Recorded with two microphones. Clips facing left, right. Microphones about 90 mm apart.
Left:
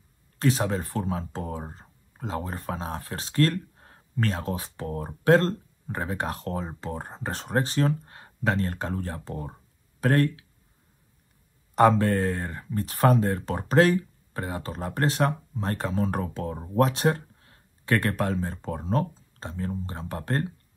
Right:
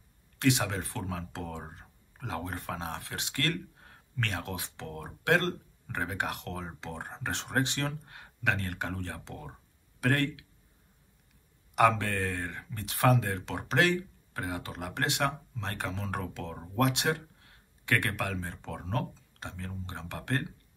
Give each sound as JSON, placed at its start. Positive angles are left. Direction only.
{"t": 0.4, "sound": "speech", "side_deg": 35}
{"t": 11.7, "sound": "speech", "side_deg": 35}
{"t": 18.8, "sound": "speech", "side_deg": 25}